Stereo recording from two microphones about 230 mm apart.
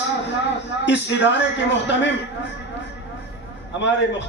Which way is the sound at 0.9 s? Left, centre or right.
Left.